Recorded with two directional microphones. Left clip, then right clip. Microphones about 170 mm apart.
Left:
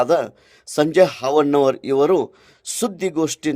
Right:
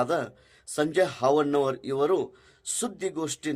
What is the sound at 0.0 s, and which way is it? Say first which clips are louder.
Speech: left 9 dB; 45° left (ahead or behind).